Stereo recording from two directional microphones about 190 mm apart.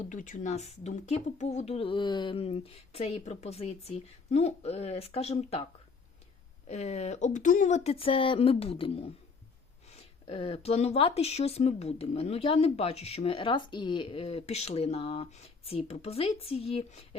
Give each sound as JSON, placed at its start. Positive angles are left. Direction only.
{"t": 0.0, "sound": "speech", "side_deg": 40}
{"t": 6.7, "sound": "speech", "side_deg": 35}